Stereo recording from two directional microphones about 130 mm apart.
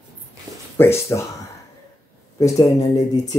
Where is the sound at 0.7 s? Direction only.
20° left (ahead or behind).